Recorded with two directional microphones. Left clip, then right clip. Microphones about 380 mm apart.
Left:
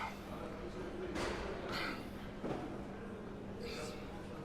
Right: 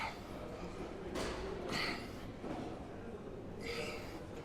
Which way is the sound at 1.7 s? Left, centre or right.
Centre.